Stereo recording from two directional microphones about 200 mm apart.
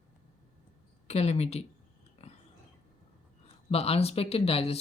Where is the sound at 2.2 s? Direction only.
30° left (ahead or behind).